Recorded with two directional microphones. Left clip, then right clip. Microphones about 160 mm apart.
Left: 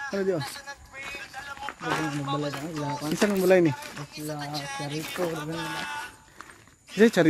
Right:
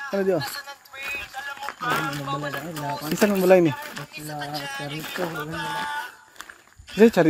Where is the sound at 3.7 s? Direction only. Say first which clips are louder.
Right 4 dB; 40° right (ahead or behind).